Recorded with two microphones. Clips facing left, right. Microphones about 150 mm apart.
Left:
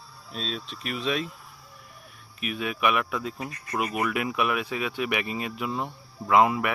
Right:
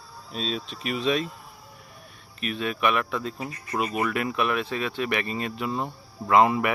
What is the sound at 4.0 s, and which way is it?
Speech, 10° left (ahead or behind).